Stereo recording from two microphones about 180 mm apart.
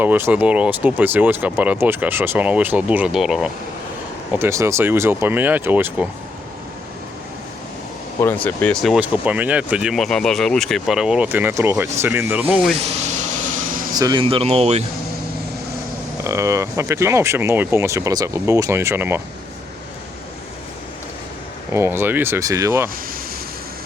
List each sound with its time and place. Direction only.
0.0 s speech: 10° right (ahead or behind)
4.4 s speech: 15° right (ahead or behind)
8.2 s speech: 10° left (ahead or behind); by 12.7 s 10° right (ahead or behind)
12.8 s vehicle: 40° right (ahead or behind)
13.9 s speech: 25° right (ahead or behind)
16.2 s speech: 15° right (ahead or behind)
21.7 s speech: 15° right (ahead or behind)